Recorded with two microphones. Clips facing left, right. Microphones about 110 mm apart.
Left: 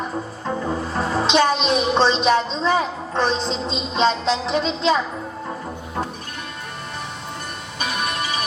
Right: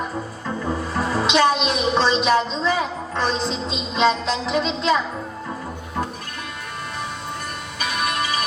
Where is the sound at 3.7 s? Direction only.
30° left (ahead or behind).